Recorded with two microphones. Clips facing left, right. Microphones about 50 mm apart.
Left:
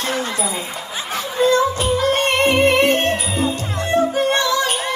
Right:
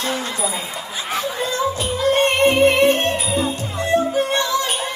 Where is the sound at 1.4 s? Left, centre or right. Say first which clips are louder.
Left 10 dB; left.